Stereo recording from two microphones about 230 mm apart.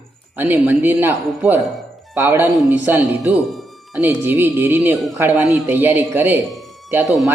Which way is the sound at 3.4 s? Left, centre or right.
Centre.